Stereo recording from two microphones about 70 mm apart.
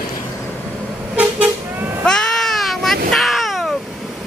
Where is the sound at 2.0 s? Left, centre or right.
Centre.